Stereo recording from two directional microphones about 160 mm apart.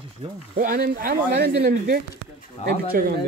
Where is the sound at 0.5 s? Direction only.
60° right (ahead or behind).